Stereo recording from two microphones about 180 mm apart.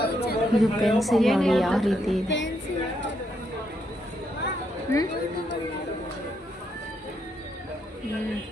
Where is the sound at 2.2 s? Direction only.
90° left.